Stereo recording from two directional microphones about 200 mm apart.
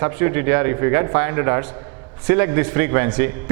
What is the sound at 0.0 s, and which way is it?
A man's voice, 15° right (ahead or behind).